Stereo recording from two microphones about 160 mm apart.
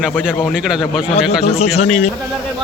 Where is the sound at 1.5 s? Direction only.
40° left (ahead or behind).